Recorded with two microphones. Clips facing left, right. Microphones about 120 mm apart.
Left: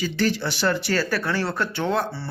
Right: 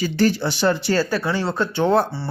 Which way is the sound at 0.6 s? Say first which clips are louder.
Right 4 dB; 25° right (ahead or behind).